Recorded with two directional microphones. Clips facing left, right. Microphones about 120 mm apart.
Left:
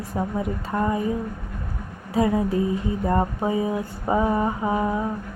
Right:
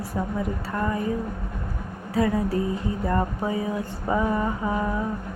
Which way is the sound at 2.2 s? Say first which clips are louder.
Left 2 dB; 20° left (ahead or behind).